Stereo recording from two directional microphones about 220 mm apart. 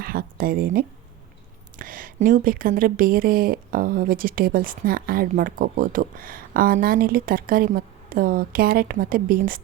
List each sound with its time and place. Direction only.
0.0 s speech: 40° right (ahead or behind)